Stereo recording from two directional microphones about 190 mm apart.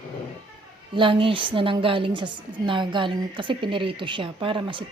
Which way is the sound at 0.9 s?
25° right (ahead or behind).